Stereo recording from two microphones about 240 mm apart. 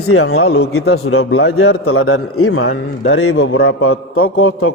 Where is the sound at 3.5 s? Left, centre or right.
Left.